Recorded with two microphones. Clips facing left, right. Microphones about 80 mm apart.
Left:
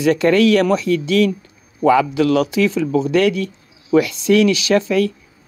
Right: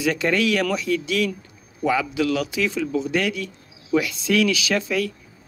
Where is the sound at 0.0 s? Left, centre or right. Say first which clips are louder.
Left 8 dB; left.